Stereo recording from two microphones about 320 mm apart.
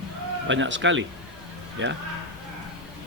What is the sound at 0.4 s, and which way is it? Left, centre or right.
A man's voice, right.